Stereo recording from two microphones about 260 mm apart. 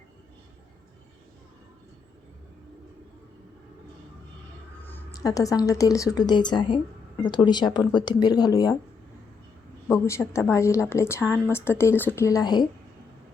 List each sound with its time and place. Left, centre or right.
4.9 s a woman's voice: centre
9.9 s speech: centre